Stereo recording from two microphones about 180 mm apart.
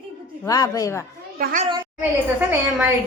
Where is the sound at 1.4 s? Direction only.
45° right (ahead or behind).